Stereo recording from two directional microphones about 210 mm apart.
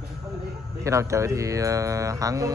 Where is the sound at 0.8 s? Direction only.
15° right (ahead or behind).